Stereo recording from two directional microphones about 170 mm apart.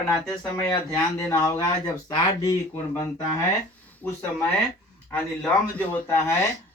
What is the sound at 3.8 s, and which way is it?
Speech, 10° left (ahead or behind).